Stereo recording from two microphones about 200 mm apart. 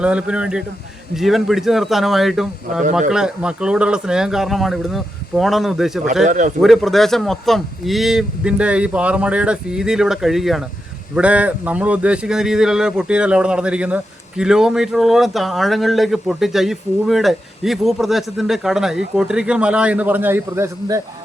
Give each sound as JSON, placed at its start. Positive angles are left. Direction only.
{"t": 0.0, "sound": "speech", "side_deg": -5}
{"t": 6.2, "sound": "speech", "side_deg": -40}
{"t": 6.6, "sound": "speech", "side_deg": 0}